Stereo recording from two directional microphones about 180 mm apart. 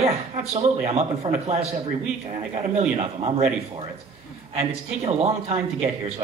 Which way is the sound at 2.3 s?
35° right (ahead or behind).